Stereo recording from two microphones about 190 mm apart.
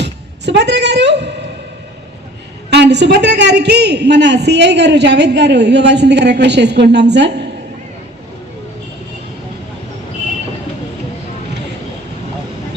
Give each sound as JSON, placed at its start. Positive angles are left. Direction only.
{"t": 0.0, "sound": "speech", "side_deg": -65}
{"t": 2.6, "sound": "a woman's voice", "side_deg": -60}